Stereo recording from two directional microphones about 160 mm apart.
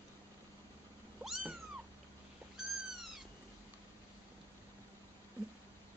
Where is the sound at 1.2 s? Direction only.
5° right (ahead or behind).